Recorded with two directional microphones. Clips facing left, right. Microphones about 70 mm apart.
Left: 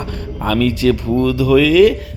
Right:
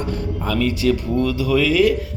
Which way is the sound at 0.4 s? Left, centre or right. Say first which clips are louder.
Left 5 dB; left.